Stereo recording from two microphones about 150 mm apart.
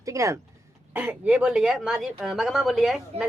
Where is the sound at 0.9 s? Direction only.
10° right (ahead or behind).